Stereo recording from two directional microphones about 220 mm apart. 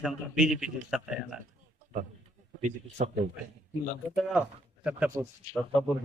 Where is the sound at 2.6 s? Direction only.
35° right (ahead or behind).